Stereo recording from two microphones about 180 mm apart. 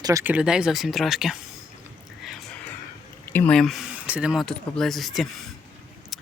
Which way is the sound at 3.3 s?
5° left (ahead or behind).